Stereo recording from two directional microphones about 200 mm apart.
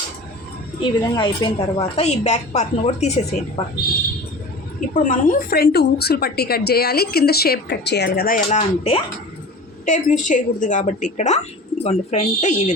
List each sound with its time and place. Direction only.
0.8 s a woman's voice: 25° left (ahead or behind)
4.9 s a woman's voice: 40° left (ahead or behind)
8.4 s a woman's voice: 30° left (ahead or behind)